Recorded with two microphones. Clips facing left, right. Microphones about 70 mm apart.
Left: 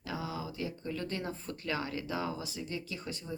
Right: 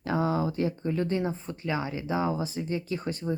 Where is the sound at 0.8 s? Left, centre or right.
Right.